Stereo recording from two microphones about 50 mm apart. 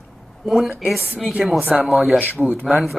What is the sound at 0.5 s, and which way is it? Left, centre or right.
Speech, centre.